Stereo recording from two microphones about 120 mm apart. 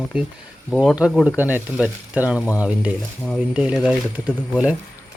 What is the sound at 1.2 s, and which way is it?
Speech, 15° right (ahead or behind).